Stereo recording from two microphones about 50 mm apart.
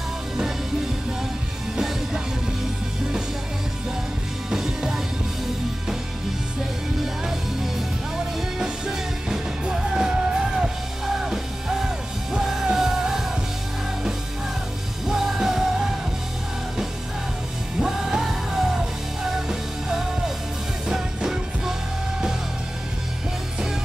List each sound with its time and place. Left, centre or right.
4.5 s music: centre
7.0 s music: centre
11.8 s music: centre
15.0 s music: centre
17.7 s music: centre
20.9 s music: centre